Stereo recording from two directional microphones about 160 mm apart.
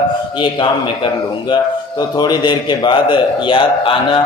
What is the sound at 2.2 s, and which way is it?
A man's voice, 25° left (ahead or behind).